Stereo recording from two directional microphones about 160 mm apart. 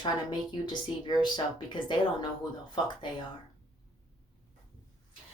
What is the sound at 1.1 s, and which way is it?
Speech, 30° left (ahead or behind).